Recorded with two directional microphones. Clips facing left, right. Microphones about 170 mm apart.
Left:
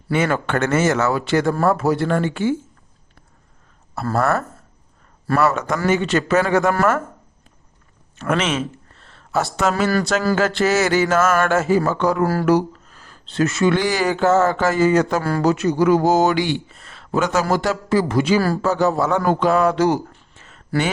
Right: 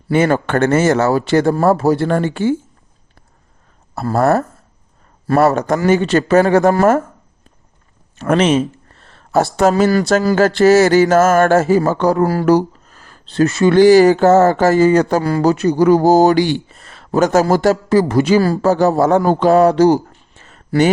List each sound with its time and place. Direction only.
0.1 s speech: 40° right (ahead or behind)
4.1 s speech: 40° right (ahead or behind)
8.2 s speech: 35° right (ahead or behind)
12.2 s speech: 20° right (ahead or behind)
12.5 s speech: 40° right (ahead or behind)
18.3 s speech: 20° right (ahead or behind)
18.6 s speech: 40° right (ahead or behind)